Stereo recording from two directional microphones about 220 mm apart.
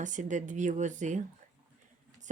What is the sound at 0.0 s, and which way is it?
Speech, 35° right (ahead or behind).